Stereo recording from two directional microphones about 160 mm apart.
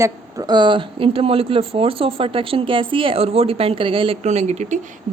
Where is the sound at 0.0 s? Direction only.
25° right (ahead or behind).